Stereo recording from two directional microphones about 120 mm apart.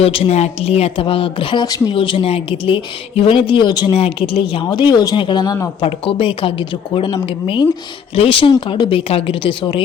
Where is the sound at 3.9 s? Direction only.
50° left (ahead or behind).